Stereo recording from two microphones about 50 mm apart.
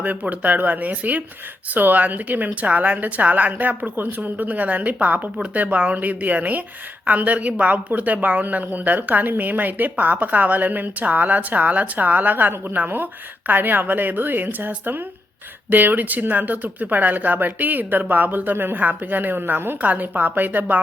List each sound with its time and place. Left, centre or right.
0.3 s a woman's voice: right
19.8 s a woman's voice: right